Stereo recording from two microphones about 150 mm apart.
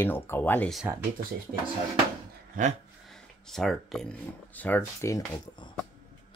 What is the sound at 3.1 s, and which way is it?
Speech, centre (ahead or behind).